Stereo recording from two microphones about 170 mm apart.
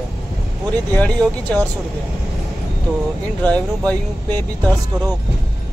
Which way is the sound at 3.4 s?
10° left (ahead or behind).